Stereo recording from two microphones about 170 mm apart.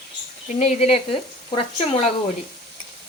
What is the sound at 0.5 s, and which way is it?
Speech, 40° left (ahead or behind).